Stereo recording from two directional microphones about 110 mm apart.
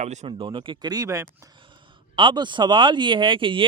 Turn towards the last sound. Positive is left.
turn(degrees=-50)  # may be behind; listen again after turning